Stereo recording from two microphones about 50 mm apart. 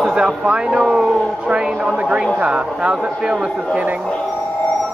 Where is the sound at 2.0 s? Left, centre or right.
Centre.